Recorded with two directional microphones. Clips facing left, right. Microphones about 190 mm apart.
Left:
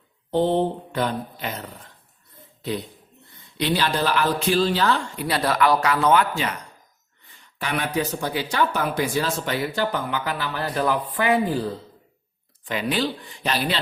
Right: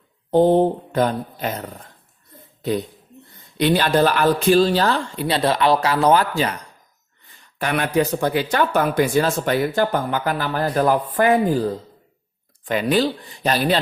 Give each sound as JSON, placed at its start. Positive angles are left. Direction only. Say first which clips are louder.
{"t": 0.3, "sound": "speech", "louder": "right 6 dB", "side_deg": -45}
{"t": 7.6, "sound": "speech", "louder": "right 5 dB", "side_deg": -55}
{"t": 12.6, "sound": "speech", "louder": "right 6 dB", "side_deg": -45}